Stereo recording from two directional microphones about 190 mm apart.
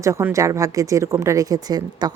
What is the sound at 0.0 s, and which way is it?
A woman's voice, 15° right (ahead or behind).